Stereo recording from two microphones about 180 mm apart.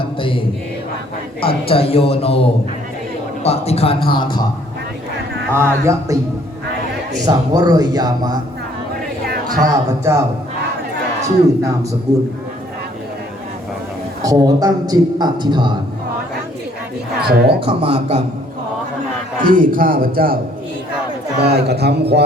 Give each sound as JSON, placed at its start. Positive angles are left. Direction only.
{"t": 0.2, "sound": "mantra", "side_deg": 30}
{"t": 1.4, "sound": "a man's voice", "side_deg": 30}
{"t": 5.5, "sound": "speech", "side_deg": -15}
{"t": 7.3, "sound": "a man's voice", "side_deg": -20}
{"t": 9.2, "sound": "a sound", "side_deg": -60}
{"t": 9.7, "sound": "speech", "side_deg": -15}
{"t": 14.2, "sound": "a man's voice", "side_deg": -20}
{"t": 17.2, "sound": "a man's voice", "side_deg": -60}
{"t": 17.7, "sound": "a man's voice", "side_deg": -30}
{"t": 19.4, "sound": "a man's voice", "side_deg": -50}